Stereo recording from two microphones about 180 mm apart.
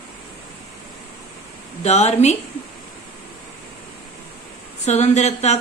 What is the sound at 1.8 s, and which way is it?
Speech, 35° left (ahead or behind).